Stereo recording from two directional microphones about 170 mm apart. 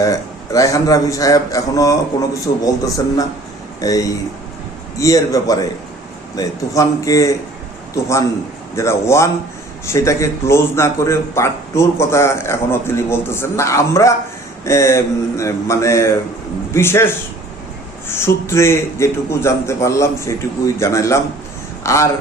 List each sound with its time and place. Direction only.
0.0 s a man's voice: 20° left (ahead or behind)
18.1 s a man's voice: 15° left (ahead or behind)